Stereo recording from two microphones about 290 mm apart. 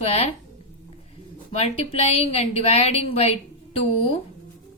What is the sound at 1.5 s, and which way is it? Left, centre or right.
A woman's voice, left.